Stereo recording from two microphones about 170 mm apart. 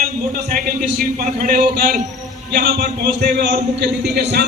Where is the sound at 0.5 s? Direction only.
60° right (ahead or behind).